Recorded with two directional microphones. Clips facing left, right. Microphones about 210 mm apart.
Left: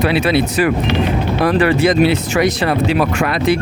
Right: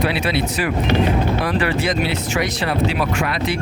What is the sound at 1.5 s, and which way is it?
Speech, 55° left (ahead or behind).